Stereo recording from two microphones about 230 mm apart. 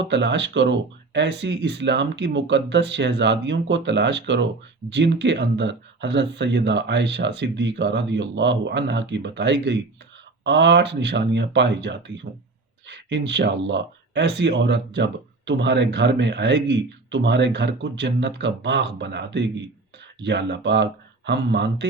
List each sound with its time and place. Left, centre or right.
0.0 s speech: right